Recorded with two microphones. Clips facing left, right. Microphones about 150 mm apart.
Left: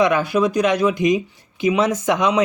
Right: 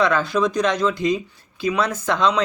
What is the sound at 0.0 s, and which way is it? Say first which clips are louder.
Speech: left 2 dB; 15° left (ahead or behind).